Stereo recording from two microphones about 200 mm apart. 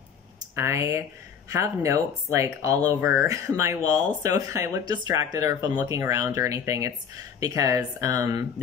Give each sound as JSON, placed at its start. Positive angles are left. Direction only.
{"t": 0.6, "sound": "speech", "side_deg": -15}